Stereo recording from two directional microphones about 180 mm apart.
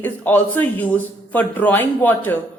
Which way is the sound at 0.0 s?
10° left (ahead or behind).